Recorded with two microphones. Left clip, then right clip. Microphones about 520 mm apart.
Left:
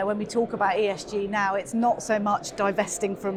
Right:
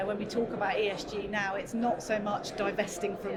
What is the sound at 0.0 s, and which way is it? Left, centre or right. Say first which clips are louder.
A woman's voice: left 6 dB; left.